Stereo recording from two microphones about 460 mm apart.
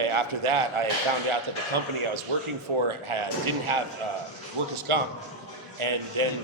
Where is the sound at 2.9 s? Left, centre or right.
Right.